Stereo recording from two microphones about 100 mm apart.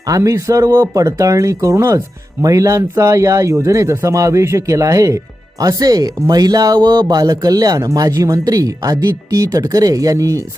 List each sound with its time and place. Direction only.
0.0 s speech: 35° right (ahead or behind)